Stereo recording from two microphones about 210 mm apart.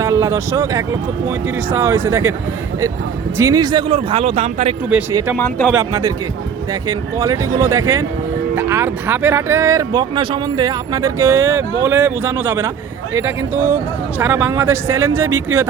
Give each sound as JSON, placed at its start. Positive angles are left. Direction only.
{"t": 0.0, "sound": "speech", "side_deg": -15}
{"t": 3.3, "sound": "speech", "side_deg": -15}
{"t": 5.4, "sound": "speech", "side_deg": 10}
{"t": 5.7, "sound": "speech", "side_deg": -15}